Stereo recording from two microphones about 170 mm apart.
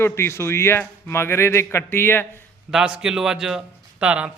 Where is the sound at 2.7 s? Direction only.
5° right (ahead or behind).